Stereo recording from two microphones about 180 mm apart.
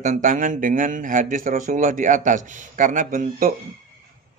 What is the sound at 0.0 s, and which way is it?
Speech, 45° right (ahead or behind).